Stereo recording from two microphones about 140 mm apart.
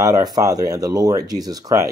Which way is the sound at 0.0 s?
25° right (ahead or behind).